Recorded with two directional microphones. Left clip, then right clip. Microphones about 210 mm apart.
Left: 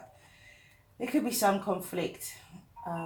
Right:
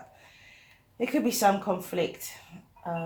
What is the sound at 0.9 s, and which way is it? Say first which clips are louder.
Speech: right 4 dB; 40° right (ahead or behind).